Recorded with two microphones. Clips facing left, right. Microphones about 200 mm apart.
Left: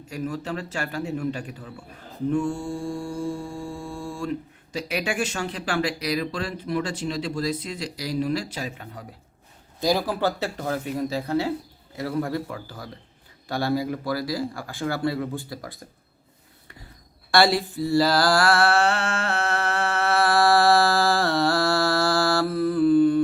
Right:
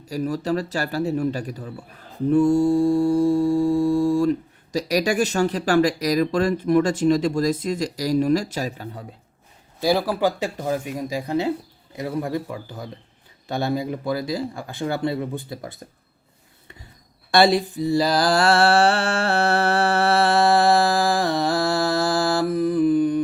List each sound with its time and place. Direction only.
0.1 s mantra: 40° right (ahead or behind)
4.7 s speech: 40° right (ahead or behind)
10.1 s speech: 10° right (ahead or behind)
17.3 s mantra: 20° right (ahead or behind)